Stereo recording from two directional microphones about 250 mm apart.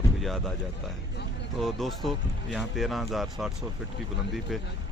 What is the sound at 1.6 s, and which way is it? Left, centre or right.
Speech, centre.